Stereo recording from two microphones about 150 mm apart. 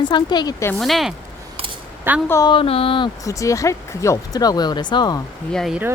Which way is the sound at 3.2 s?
20° left (ahead or behind).